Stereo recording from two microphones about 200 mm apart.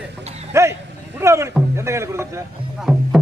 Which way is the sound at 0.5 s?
15° right (ahead or behind).